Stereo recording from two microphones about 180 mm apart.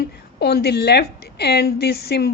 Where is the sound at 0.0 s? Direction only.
65° left (ahead or behind).